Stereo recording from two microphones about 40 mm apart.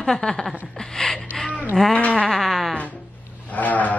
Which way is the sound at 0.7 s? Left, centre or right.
Centre.